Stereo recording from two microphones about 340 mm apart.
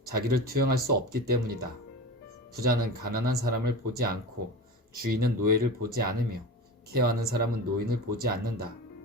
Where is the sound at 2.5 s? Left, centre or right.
Right.